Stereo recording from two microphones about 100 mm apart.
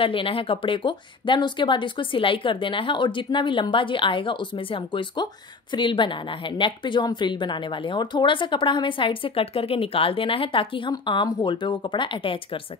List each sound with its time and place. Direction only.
0.0 s speech: 65° left (ahead or behind)
10.9 s speech: 45° left (ahead or behind)